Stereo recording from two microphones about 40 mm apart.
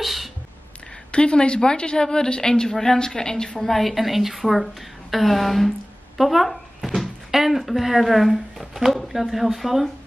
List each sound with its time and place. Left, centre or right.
0.0 s a sound: centre
1.1 s speech: left
3.6 s a woman's voice: centre